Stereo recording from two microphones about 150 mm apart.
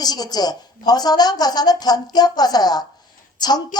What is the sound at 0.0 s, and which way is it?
Speech, 25° left (ahead or behind).